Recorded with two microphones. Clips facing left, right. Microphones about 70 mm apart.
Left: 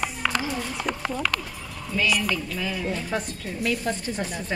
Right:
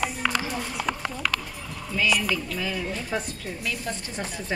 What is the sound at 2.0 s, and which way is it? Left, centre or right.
Speech, centre.